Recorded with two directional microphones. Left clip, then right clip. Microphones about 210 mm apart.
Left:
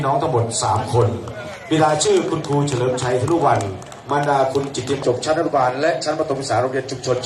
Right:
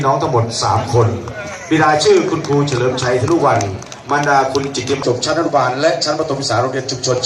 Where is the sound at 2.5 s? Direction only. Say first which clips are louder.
Right 5 dB; 45° left (ahead or behind).